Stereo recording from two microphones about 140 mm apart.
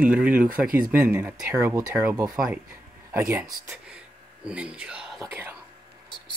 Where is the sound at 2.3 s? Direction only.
5° right (ahead or behind).